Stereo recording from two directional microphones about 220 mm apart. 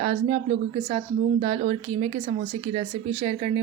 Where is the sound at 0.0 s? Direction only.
30° right (ahead or behind).